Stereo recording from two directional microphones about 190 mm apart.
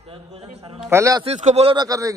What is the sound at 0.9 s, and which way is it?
Speech, 15° right (ahead or behind).